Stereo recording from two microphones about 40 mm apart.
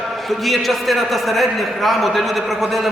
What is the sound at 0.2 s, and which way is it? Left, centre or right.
A man's voice, centre.